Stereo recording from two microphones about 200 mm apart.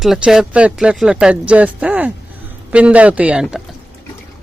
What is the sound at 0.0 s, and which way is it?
Speech, centre (ahead or behind).